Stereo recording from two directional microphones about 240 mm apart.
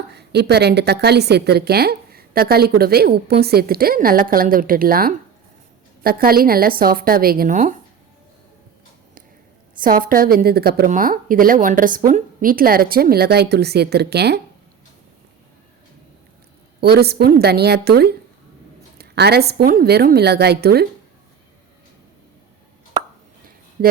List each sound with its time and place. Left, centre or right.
0.1 s a woman's voice: right
9.8 s a woman's voice: right
16.8 s a woman's voice: right